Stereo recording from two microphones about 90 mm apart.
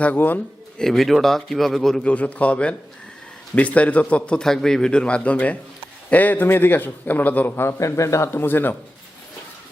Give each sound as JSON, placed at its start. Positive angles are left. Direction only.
{"t": 0.0, "sound": "a man's voice", "side_deg": 20}
{"t": 0.8, "sound": "a man's voice", "side_deg": 5}